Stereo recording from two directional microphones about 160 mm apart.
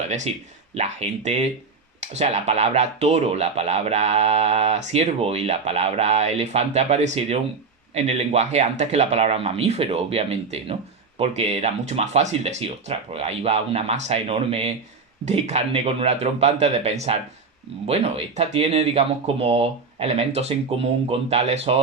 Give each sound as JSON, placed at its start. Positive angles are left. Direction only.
{"t": 0.1, "sound": "speech", "side_deg": -40}